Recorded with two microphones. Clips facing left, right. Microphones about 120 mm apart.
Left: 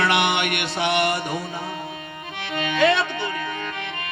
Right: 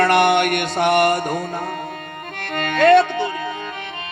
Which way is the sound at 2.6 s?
50° right (ahead or behind).